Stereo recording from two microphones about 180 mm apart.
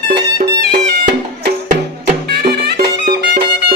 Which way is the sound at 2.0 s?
60° right (ahead or behind).